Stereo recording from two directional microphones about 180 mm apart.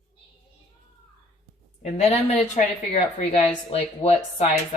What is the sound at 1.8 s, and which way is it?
A woman's voice, 35° left (ahead or behind).